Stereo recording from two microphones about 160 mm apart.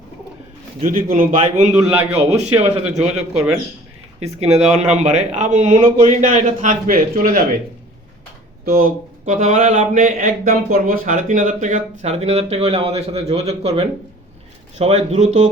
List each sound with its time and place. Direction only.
0.9 s a man's voice: 60° right (ahead or behind)
1.8 s a man's voice: 15° right (ahead or behind)
2.1 s speech: 45° right (ahead or behind); by 7.4 s 65° right (ahead or behind)
8.6 s speech: 65° right (ahead or behind); by 15.4 s 45° right (ahead or behind)